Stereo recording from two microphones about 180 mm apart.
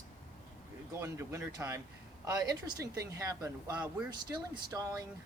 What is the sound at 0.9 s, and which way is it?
Speech, 15° right (ahead or behind).